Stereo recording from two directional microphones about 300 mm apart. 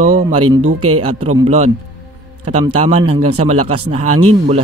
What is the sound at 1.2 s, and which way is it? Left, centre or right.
Speech, right.